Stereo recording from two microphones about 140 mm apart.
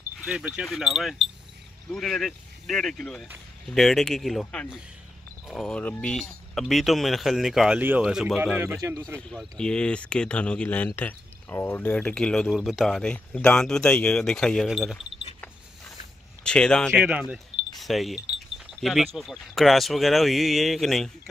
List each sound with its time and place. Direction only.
0.2 s speech: 5° right (ahead or behind)
8.5 s speech: 20° right (ahead or behind)
9.3 s speech: 5° left (ahead or behind)
16.4 s speech: 5° left (ahead or behind)
17.0 s speech: 5° right (ahead or behind)